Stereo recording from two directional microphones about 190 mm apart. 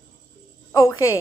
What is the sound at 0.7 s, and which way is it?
Speech, 15° left (ahead or behind).